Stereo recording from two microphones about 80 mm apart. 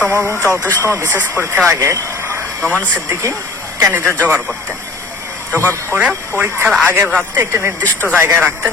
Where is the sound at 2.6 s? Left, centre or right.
Left.